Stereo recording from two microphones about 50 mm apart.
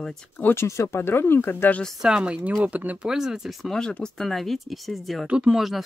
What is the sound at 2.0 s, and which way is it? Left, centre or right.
Speech, centre.